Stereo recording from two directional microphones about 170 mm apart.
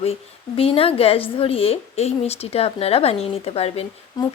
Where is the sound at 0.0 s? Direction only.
35° left (ahead or behind).